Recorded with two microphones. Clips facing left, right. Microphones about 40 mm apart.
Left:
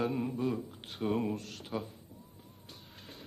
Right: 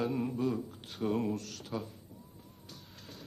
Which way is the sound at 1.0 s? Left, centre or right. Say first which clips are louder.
Even; centre.